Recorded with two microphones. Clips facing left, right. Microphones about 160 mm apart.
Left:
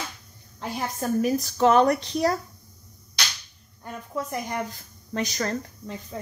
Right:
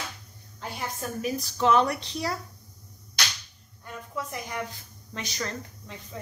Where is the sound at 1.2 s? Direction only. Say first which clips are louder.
Left 4 dB; 45° left (ahead or behind).